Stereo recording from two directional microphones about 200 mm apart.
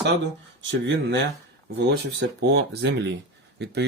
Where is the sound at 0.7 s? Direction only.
65° right (ahead or behind).